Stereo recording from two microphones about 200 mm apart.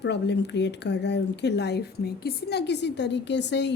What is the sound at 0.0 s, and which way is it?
Speech, 60° left (ahead or behind).